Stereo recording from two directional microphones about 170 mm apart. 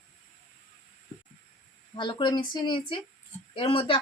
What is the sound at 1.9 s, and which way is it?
Speech, 25° left (ahead or behind).